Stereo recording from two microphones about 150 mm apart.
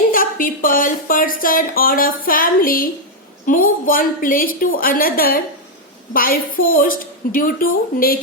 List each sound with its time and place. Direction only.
0.1 s speech: 70° left (ahead or behind)